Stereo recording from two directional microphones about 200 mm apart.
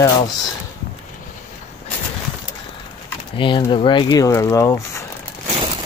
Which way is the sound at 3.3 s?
25° left (ahead or behind).